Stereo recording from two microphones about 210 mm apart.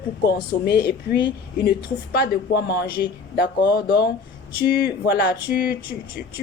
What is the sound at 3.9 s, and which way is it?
Speech, 50° left (ahead or behind).